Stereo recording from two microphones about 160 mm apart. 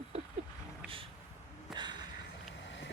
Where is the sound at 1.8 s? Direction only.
30° right (ahead or behind).